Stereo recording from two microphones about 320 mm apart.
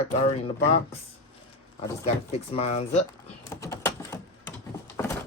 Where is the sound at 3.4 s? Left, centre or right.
Centre.